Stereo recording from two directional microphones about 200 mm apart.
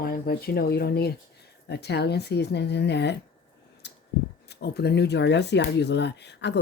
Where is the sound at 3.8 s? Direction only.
60° left (ahead or behind).